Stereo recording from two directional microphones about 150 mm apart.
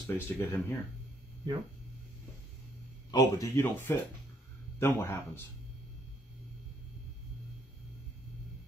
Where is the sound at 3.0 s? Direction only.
25° left (ahead or behind).